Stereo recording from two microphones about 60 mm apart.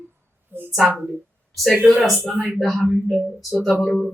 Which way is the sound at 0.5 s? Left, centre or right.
Right.